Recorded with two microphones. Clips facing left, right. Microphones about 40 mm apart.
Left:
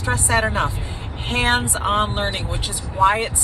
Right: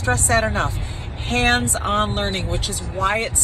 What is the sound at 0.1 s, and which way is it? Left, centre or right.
Speech, left.